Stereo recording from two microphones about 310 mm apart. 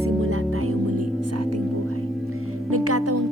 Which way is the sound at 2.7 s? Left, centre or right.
Right.